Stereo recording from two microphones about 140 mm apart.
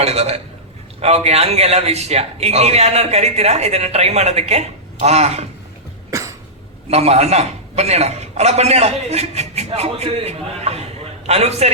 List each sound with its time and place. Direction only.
0.0 s a man's voice: 50° right (ahead or behind)
6.1 s cough: 20° right (ahead or behind)
6.8 s a man's voice: 50° right (ahead or behind)